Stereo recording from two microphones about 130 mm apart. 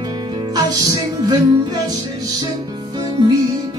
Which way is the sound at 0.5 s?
30° right (ahead or behind).